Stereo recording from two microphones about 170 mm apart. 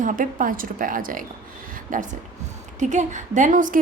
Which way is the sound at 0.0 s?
50° right (ahead or behind).